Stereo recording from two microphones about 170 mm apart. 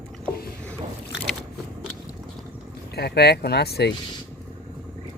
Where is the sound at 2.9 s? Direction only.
70° left (ahead or behind).